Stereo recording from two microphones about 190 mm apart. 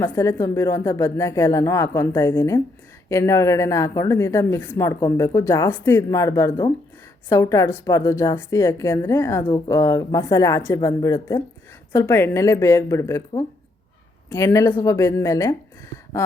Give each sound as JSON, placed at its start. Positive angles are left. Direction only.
{"t": 0.0, "sound": "a woman's voice", "side_deg": 15}